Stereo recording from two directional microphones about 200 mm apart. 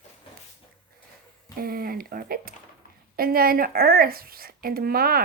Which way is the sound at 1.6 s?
50° right (ahead or behind).